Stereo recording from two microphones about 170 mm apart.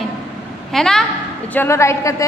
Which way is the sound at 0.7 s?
5° left (ahead or behind).